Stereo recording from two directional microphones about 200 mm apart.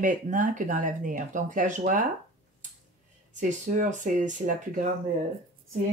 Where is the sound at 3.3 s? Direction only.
40° right (ahead or behind).